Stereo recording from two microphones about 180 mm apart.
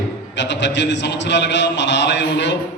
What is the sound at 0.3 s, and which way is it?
A man's voice, 85° left.